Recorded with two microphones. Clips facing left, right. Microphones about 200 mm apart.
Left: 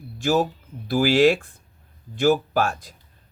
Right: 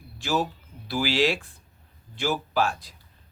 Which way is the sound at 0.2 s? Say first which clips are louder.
Left 6 dB; 45° left (ahead or behind).